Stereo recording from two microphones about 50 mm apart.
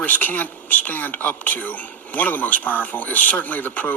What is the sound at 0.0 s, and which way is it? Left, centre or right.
A man's voice, left.